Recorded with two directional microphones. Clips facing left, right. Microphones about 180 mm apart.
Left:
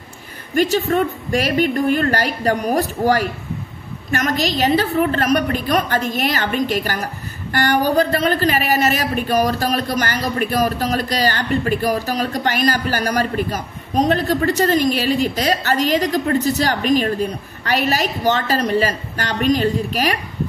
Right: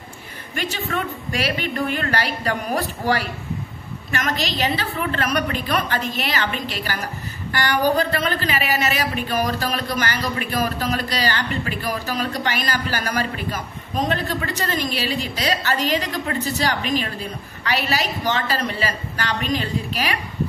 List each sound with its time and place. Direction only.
0.6 s a woman's voice: 45° left (ahead or behind)